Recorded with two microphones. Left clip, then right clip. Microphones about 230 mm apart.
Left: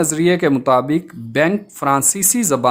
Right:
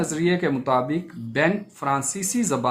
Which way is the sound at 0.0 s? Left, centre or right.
Left.